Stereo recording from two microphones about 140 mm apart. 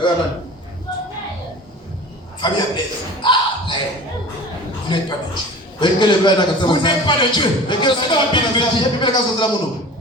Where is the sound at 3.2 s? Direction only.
35° left (ahead or behind).